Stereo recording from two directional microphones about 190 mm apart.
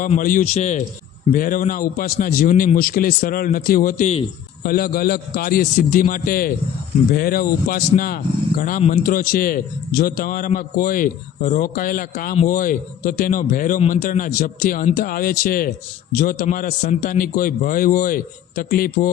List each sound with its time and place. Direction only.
0.2 s a man's voice: 45° left (ahead or behind)